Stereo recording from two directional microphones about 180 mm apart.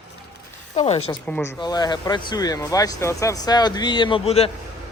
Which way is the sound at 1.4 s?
25° left (ahead or behind).